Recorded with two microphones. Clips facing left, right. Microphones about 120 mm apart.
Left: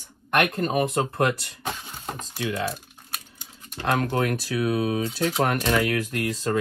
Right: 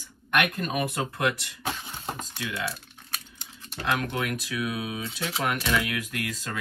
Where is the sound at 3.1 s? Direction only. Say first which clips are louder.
Left 1 dB; 5° left (ahead or behind).